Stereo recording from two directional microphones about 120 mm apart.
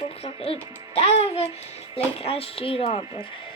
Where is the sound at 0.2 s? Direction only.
55° left (ahead or behind).